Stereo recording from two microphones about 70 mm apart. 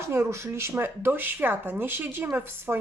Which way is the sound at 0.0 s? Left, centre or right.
Right.